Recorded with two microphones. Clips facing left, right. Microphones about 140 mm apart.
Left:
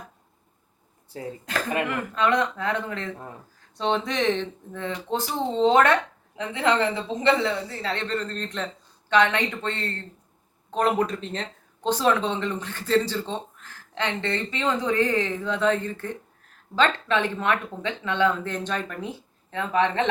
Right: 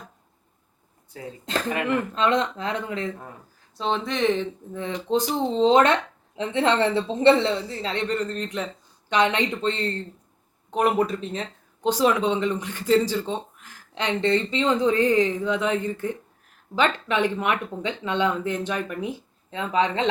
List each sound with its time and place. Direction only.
1.5 s a woman's voice: 25° right (ahead or behind)
3.8 s speech: centre (ahead or behind)
4.8 s a woman's voice: 20° right (ahead or behind)